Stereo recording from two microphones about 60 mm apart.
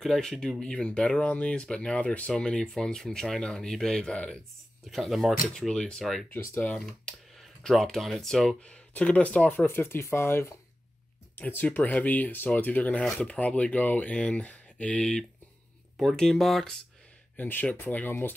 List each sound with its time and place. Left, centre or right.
0.0 s speech: centre
4.9 s speech: centre
5.5 s speech: centre
5.9 s speech: centre
6.6 s speech: left
7.6 s speech: centre
8.6 s speech: centre
9.7 s speech: left
11.3 s speech: left; by 16.7 s centre
17.4 s speech: left